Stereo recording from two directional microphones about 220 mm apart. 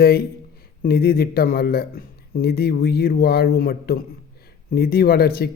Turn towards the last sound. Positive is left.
turn(degrees=45)  # may be behind; listen again after turning